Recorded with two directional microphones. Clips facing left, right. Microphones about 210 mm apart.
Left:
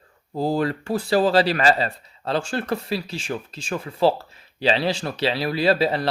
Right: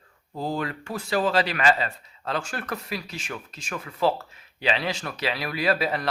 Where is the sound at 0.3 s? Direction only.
35° left (ahead or behind).